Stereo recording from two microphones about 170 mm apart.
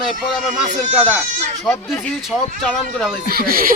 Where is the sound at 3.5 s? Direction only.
60° right (ahead or behind).